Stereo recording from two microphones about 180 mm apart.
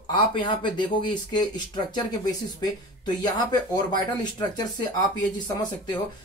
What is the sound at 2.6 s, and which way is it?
Speech, 20° left (ahead or behind).